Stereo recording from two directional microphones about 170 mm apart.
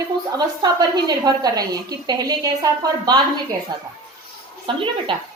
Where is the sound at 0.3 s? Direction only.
25° right (ahead or behind).